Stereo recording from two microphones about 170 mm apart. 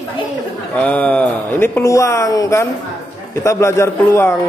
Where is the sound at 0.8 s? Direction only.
10° left (ahead or behind).